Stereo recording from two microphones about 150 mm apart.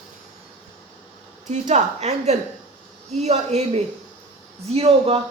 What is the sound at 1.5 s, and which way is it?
A man's voice, 50° right (ahead or behind).